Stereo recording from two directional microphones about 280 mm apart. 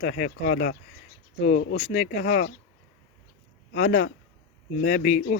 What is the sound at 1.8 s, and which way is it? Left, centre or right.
Speech, left.